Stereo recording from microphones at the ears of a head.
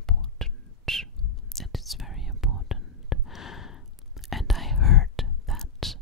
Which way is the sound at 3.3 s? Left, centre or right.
Left.